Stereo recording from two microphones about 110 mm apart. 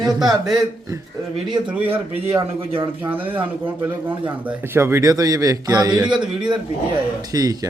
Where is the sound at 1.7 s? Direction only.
15° right (ahead or behind); by 6.0 s 35° right (ahead or behind).